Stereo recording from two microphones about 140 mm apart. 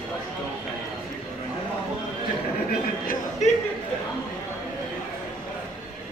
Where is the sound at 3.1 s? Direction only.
55° left (ahead or behind).